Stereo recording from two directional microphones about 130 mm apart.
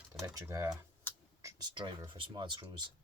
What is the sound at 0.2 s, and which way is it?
Speech, 25° right (ahead or behind).